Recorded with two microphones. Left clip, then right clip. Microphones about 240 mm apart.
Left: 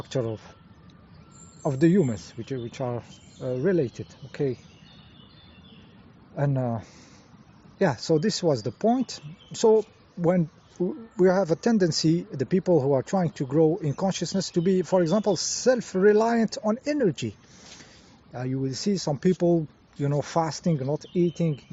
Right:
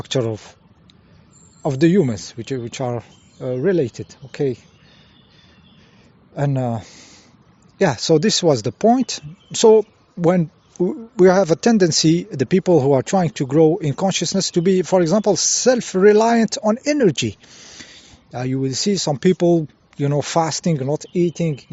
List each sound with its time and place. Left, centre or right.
0.0 s speech: right
1.6 s speech: right
6.3 s speech: right